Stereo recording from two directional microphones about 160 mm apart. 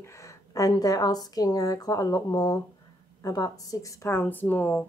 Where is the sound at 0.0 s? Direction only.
20° left (ahead or behind).